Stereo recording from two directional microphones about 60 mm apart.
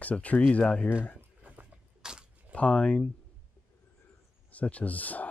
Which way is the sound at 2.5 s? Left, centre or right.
Centre.